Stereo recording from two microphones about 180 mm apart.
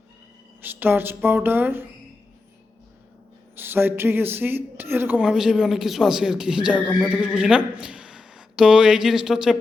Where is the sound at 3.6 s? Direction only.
10° right (ahead or behind).